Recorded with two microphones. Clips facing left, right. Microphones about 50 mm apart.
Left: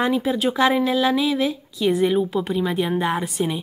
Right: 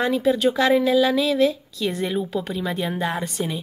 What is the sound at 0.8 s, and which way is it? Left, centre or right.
Speech, centre.